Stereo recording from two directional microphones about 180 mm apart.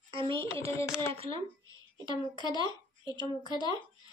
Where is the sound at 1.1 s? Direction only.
30° right (ahead or behind).